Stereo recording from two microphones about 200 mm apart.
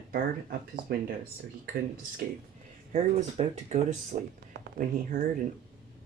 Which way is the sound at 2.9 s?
35° right (ahead or behind).